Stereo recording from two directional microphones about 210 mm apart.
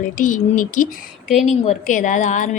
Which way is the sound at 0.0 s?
40° left (ahead or behind).